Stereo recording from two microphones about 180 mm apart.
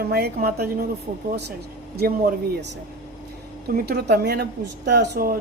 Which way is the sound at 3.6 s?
55° right (ahead or behind).